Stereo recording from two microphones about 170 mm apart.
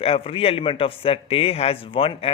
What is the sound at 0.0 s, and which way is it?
A man's voice, 35° left (ahead or behind).